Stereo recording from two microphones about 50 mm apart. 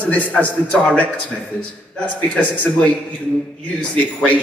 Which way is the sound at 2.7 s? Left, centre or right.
Centre.